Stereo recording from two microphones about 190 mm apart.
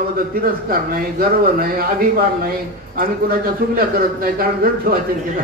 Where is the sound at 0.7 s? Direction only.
50° right (ahead or behind).